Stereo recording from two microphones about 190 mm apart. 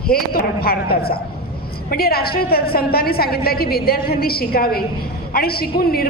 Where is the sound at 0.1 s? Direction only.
50° left (ahead or behind).